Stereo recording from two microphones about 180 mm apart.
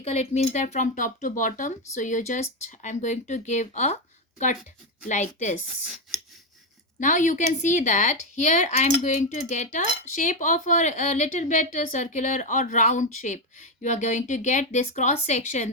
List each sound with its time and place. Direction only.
0.0 s speech: 40° left (ahead or behind)
7.0 s speech: 45° left (ahead or behind)